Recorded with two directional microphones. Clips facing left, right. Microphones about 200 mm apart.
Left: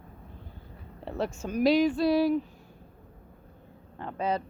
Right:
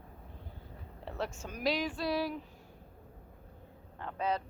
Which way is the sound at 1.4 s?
30° left (ahead or behind).